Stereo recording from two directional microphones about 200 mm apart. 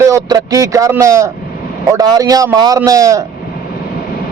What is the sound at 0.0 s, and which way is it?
A man's voice, 15° right (ahead or behind).